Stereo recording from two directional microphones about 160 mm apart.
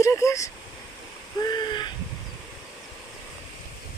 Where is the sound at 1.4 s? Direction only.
30° left (ahead or behind).